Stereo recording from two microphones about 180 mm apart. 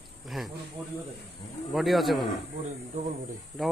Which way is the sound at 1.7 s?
Centre (ahead or behind).